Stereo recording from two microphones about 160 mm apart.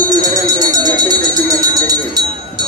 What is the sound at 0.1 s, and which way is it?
Music, 25° right (ahead or behind).